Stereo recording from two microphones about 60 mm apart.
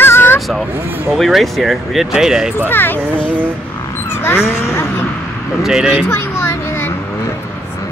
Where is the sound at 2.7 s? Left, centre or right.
Left.